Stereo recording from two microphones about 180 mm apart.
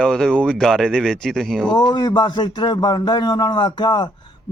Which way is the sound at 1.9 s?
25° left (ahead or behind).